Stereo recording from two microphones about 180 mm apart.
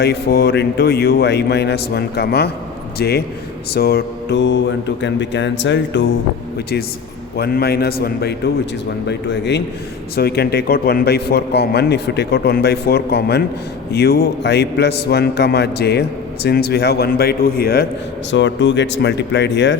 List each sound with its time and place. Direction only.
0.0 s a man's voice: 65° left (ahead or behind)
3.8 s mantra: 60° left (ahead or behind); by 6.1 s 80° left
7.3 s a man's voice: 60° left (ahead or behind)
9.0 s mantra: 75° left (ahead or behind)
10.2 s a man's voice: 60° left (ahead or behind)
18.3 s speech: 85° left